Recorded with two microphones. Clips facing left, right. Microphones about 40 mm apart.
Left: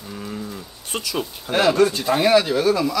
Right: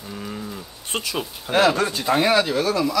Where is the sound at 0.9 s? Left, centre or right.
Right.